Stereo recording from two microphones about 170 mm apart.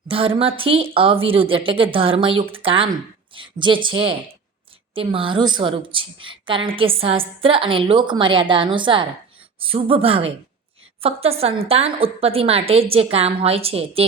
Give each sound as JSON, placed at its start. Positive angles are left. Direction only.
{"t": 0.1, "sound": "a woman's voice", "side_deg": -35}